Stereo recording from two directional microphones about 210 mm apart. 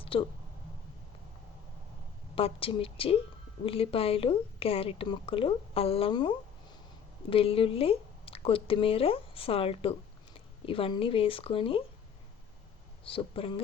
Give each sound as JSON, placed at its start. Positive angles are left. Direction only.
{"t": 0.0, "sound": "a sound", "side_deg": 25}
{"t": 2.3, "sound": "a woman's voice", "side_deg": 25}
{"t": 13.1, "sound": "a woman's voice", "side_deg": 25}